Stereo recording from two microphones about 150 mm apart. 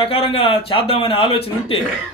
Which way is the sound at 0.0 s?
40° left (ahead or behind).